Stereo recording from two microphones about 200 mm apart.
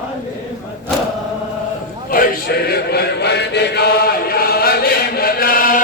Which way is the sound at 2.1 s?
50° left (ahead or behind).